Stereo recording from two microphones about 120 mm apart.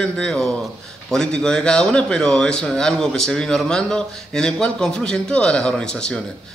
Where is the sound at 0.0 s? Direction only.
5° left (ahead or behind).